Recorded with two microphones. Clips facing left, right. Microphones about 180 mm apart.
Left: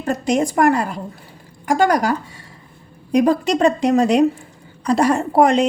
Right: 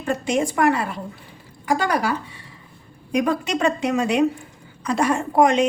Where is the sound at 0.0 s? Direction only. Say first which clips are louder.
Left 3 dB; 40° left (ahead or behind).